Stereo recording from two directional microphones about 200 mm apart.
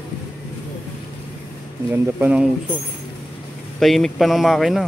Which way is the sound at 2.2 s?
5° right (ahead or behind).